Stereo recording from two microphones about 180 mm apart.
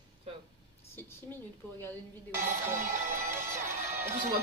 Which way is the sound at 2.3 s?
15° right (ahead or behind).